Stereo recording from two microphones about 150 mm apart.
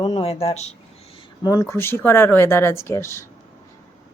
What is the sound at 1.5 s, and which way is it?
Speech, 20° left (ahead or behind).